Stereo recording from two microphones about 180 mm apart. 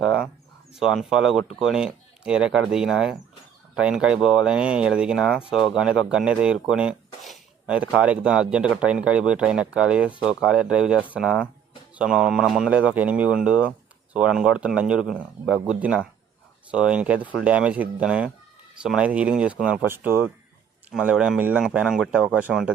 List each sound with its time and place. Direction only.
0.0 s speech: 5° right (ahead or behind)